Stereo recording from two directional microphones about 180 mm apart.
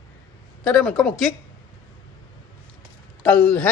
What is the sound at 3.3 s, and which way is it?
Speech, 10° left (ahead or behind).